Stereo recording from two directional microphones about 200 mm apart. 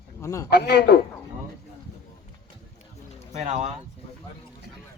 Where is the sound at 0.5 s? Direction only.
55° left (ahead or behind).